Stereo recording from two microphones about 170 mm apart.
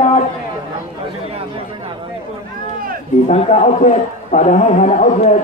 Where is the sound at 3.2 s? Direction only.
40° left (ahead or behind).